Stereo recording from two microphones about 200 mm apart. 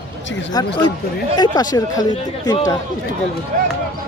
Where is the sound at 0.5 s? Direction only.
20° left (ahead or behind).